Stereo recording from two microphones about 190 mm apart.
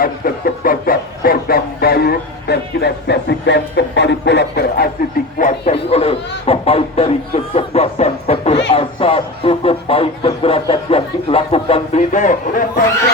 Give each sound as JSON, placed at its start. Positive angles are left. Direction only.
{"t": 0.0, "sound": "speech", "side_deg": 50}
{"t": 5.4, "sound": "a man's voice", "side_deg": 40}